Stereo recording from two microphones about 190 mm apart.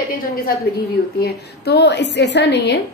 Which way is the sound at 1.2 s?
60° left (ahead or behind).